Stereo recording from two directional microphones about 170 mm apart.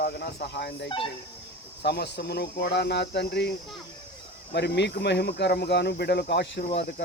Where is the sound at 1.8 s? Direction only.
70° left (ahead or behind).